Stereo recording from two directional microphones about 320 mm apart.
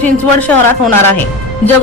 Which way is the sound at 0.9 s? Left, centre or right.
Left.